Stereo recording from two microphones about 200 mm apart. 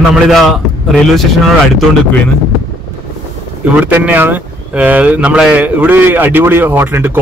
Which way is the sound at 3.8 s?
10° right (ahead or behind).